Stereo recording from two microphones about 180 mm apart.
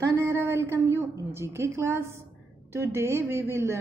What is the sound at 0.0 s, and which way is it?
A woman's voice, 15° right (ahead or behind).